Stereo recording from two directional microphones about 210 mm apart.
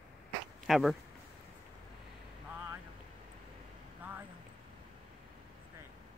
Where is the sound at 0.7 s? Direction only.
Centre (ahead or behind).